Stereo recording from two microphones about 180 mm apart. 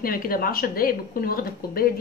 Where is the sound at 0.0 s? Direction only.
55° left (ahead or behind).